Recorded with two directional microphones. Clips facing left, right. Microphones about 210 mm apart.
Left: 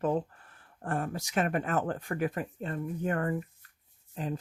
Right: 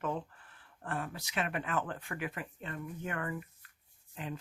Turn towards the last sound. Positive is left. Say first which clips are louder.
# left 6 dB
turn(degrees=40)  # may be behind; listen again after turning